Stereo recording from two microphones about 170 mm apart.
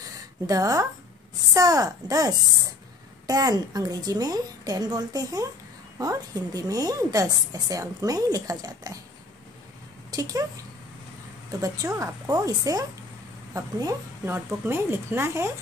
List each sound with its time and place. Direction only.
0.5 s a woman's voice: 20° right (ahead or behind)
10.1 s speech: 20° right (ahead or behind)
11.6 s a woman's voice: 20° right (ahead or behind)